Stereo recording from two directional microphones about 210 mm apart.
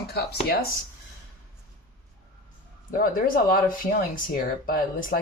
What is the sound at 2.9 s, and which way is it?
Speech, 45° left (ahead or behind).